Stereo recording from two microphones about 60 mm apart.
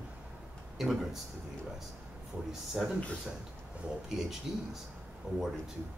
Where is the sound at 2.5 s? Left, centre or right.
Centre.